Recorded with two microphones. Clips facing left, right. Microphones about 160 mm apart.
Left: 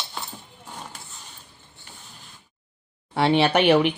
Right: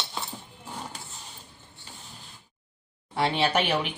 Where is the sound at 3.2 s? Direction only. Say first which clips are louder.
Left 6 dB; 65° left (ahead or behind).